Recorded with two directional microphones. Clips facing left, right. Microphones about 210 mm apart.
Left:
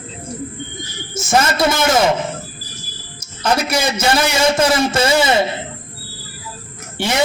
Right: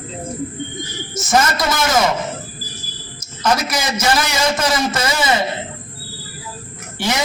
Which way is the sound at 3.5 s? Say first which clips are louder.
Left 3 dB; 30° left (ahead or behind).